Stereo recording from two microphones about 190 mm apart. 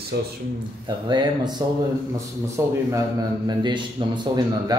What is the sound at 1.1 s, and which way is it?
A man's voice, 20° right (ahead or behind).